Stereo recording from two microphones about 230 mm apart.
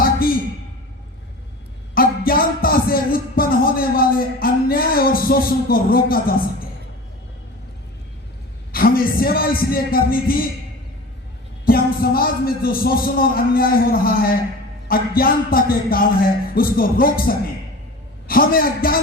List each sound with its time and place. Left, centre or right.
0.0 s a sound: left
2.0 s music: left
8.7 s a man's voice: left
11.6 s a man's voice: left